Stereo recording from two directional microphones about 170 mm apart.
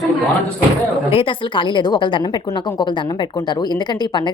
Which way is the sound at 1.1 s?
30° left (ahead or behind).